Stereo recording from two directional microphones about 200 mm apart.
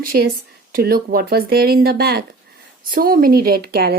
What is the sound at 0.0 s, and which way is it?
Speech, 45° right (ahead or behind).